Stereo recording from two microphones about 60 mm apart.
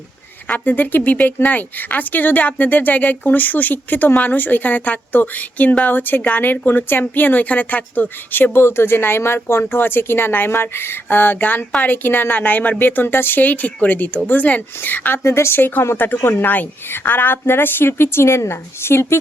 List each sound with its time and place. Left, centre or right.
0.4 s a woman's voice: left
8.5 s speech: left
15.2 s speech: left